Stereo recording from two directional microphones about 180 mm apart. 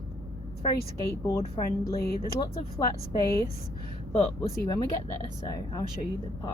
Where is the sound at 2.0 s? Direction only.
60° left (ahead or behind).